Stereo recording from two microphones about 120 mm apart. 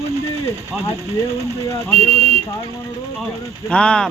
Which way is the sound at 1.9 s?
60° right (ahead or behind).